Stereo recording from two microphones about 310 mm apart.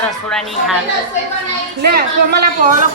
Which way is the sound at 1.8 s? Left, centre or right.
Right.